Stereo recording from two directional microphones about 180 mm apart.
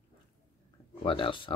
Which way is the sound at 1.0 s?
30° left (ahead or behind).